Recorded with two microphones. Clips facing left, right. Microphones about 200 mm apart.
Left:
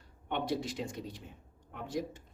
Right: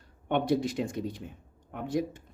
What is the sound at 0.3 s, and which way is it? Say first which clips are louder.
Speech: right 7 dB; 55° right (ahead or behind).